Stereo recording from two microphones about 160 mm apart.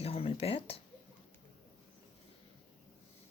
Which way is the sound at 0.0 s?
40° left (ahead or behind).